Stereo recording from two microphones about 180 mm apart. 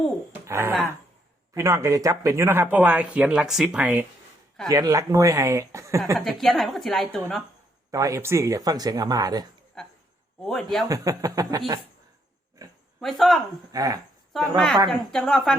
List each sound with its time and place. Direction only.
0.4 s a sound: 15° right (ahead or behind)
1.5 s speech: 15° right (ahead or behind)
6.1 s a woman's voice: centre (ahead or behind)
7.9 s speech: 20° right (ahead or behind)
9.8 s a sound: centre (ahead or behind)
10.4 s a woman's voice: centre (ahead or behind)
10.8 s speech: 20° right (ahead or behind)
13.0 s a woman's voice: centre (ahead or behind)
13.7 s speech: 20° right (ahead or behind)
14.3 s a woman's voice: centre (ahead or behind)